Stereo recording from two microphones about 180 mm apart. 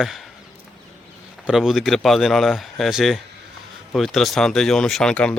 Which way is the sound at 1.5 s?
Centre (ahead or behind).